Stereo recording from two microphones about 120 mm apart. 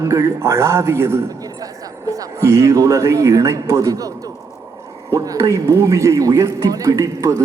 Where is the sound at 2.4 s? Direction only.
25° right (ahead or behind).